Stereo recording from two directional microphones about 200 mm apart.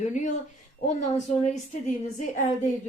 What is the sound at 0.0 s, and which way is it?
Speech, 35° left (ahead or behind).